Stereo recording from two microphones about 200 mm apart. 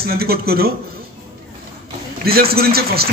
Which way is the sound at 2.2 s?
50° right (ahead or behind).